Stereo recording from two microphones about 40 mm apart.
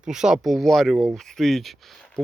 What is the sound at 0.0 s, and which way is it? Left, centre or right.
Speech, centre.